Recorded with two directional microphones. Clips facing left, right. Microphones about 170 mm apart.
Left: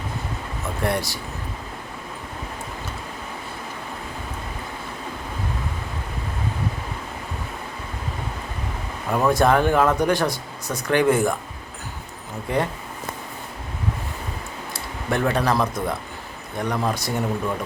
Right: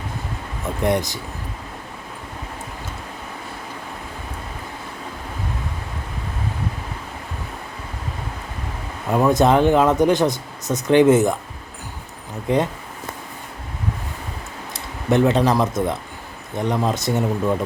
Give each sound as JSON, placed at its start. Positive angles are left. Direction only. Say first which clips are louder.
{"t": 0.8, "sound": "speech", "louder": "right 4 dB", "side_deg": -20}
{"t": 9.1, "sound": "speech", "louder": "right 3 dB", "side_deg": -20}
{"t": 12.5, "sound": "speech", "louder": "right 4 dB", "side_deg": -20}
{"t": 15.1, "sound": "speech", "louder": "right 5 dB", "side_deg": -20}